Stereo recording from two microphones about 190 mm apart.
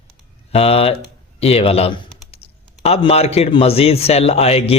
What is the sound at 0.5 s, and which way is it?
A man's voice, 30° left (ahead or behind).